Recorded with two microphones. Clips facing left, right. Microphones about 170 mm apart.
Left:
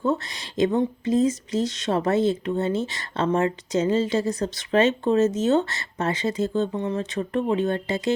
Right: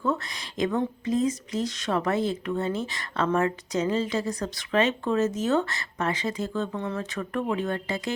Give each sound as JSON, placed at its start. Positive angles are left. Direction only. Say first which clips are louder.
{"t": 0.0, "sound": "speech", "louder": "left 3 dB", "side_deg": 25}